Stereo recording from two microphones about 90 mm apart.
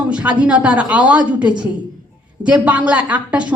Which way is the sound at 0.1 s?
15° right (ahead or behind).